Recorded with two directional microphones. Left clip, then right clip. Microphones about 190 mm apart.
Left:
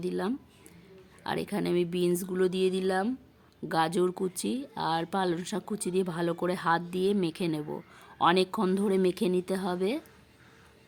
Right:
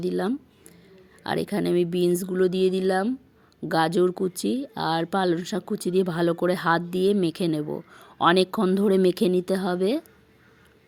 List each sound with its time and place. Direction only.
0.0 s speech: 25° right (ahead or behind)